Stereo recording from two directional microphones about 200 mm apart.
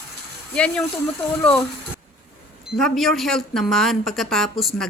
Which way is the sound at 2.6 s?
Centre (ahead or behind).